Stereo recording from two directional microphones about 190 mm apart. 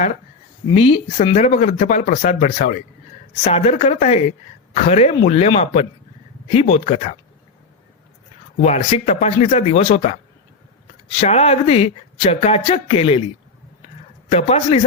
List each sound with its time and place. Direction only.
0.7 s speech: 30° left (ahead or behind)
8.6 s speech: 35° left (ahead or behind)
11.2 s speech: 35° left (ahead or behind)
14.3 s speech: 35° left (ahead or behind)